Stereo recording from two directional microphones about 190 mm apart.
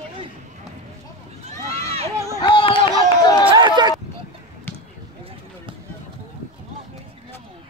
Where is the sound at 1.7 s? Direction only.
30° right (ahead or behind).